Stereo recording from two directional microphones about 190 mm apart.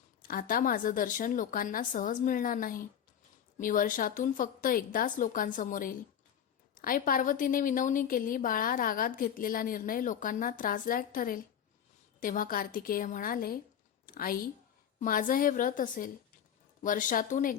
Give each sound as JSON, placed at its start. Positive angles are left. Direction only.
{"t": 0.2, "sound": "a woman's voice", "side_deg": 50}